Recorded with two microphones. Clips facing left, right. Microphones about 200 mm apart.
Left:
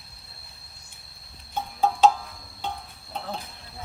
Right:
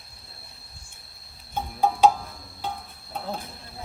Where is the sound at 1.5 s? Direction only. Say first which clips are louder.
Right 1 dB; 15° right (ahead or behind).